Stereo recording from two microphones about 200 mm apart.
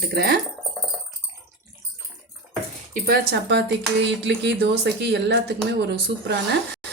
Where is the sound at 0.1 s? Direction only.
50° right (ahead or behind).